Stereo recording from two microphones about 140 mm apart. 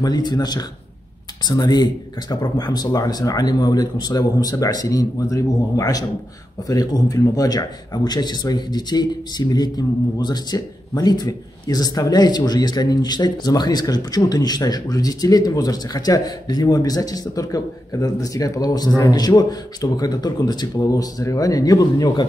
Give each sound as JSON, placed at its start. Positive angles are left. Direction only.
{"t": 0.0, "sound": "speech", "side_deg": 30}